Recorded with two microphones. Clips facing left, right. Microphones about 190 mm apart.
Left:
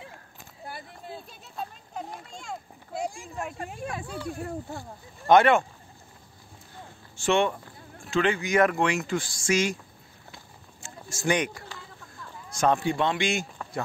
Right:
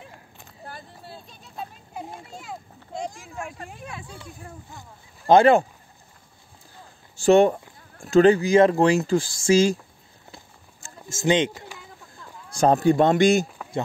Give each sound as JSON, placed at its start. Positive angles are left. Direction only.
{"t": 0.7, "sound": "a sound", "side_deg": 10}
{"t": 2.2, "sound": "a child's voice", "side_deg": -5}
{"t": 2.9, "sound": "speech", "side_deg": 10}
{"t": 4.3, "sound": "speech", "side_deg": 75}
{"t": 5.2, "sound": "speech", "side_deg": -30}
{"t": 7.2, "sound": "speech", "side_deg": -40}
{"t": 11.1, "sound": "speech", "side_deg": -25}
{"t": 12.5, "sound": "speech", "side_deg": -35}